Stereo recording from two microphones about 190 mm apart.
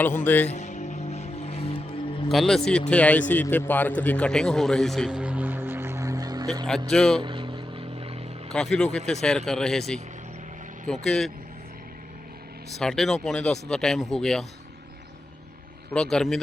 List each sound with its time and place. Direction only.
0.4 s music: 35° left (ahead or behind)
2.3 s a man's voice: centre (ahead or behind); by 6.5 s 20° right (ahead or behind)
6.9 s speech: 5° left (ahead or behind)
7.2 s vehicle: 25° right (ahead or behind)
8.5 s speech: 5° left (ahead or behind)
12.8 s speech: centre (ahead or behind)
15.9 s speech: 5° left (ahead or behind)